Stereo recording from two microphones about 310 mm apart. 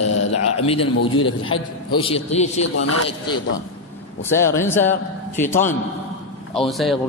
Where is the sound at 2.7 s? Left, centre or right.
Left.